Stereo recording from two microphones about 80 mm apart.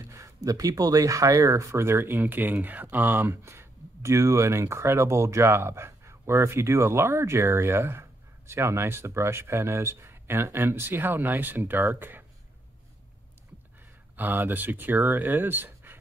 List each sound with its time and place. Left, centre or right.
0.0 s a sound: right
0.4 s speech: right
14.1 s speech: right